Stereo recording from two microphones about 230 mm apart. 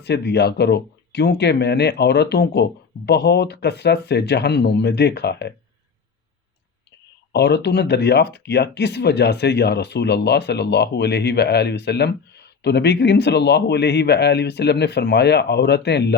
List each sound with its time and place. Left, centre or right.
0.0 s speech: left
7.3 s speech: left